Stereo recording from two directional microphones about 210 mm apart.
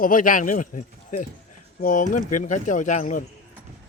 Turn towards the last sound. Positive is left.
turn(degrees=35)  # may be behind; listen again after turning